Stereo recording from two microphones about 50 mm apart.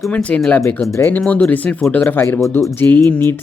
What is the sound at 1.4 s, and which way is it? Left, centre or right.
Speech, left.